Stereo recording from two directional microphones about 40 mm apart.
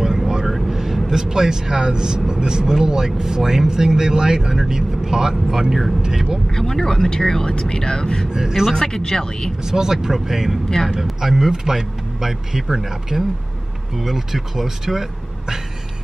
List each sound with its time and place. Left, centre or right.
0.5 s speech: centre
6.5 s speech: centre
8.3 s speech: centre
8.7 s speech: centre
9.6 s speech: centre